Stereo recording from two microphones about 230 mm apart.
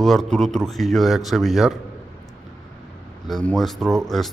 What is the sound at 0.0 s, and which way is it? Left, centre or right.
Speech, centre.